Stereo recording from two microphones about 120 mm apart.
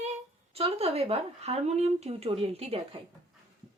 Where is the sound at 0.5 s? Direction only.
55° right (ahead or behind).